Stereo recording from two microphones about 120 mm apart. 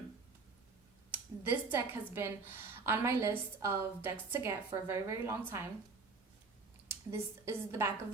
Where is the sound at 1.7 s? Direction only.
20° right (ahead or behind).